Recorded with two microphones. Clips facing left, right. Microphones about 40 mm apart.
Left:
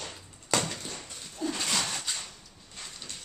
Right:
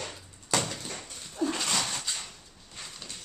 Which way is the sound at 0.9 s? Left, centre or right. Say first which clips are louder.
Right 2 dB; right.